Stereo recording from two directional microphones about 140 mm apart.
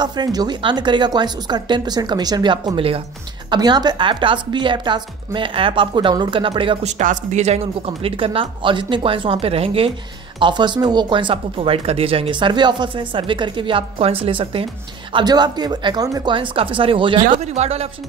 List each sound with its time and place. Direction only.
0.0 s speech: 30° right (ahead or behind)
7.0 s speech: 60° right (ahead or behind); by 9.9 s 45° right (ahead or behind)
10.4 s speech: 35° right (ahead or behind)
16.3 s speech: 40° right (ahead or behind)
17.4 s speech: 50° right (ahead or behind)